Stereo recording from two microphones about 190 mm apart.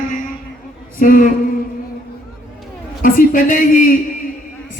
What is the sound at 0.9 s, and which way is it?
Speech, 45° left (ahead or behind).